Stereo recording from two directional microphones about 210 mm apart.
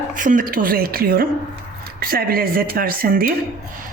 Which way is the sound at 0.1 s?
40° right (ahead or behind).